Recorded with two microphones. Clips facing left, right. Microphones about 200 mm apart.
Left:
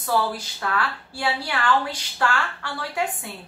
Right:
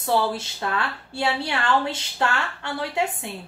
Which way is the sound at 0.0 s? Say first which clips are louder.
Right 1 dB; 25° right (ahead or behind).